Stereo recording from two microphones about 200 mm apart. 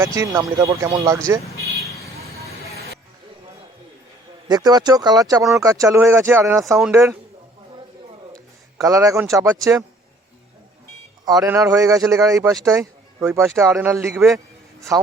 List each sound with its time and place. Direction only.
0.0 s speech: 15° right (ahead or behind)
4.4 s speech: 20° right (ahead or behind)
8.8 s speech: 15° right (ahead or behind)
11.3 s speech: 15° right (ahead or behind)
14.3 s a sound: 15° right (ahead or behind)